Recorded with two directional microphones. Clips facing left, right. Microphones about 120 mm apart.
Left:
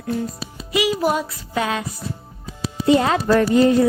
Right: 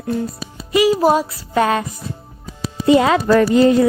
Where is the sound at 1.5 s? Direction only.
50° right (ahead or behind).